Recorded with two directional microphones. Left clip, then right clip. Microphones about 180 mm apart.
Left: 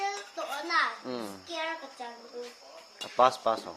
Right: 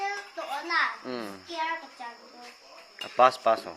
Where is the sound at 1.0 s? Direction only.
5° left (ahead or behind).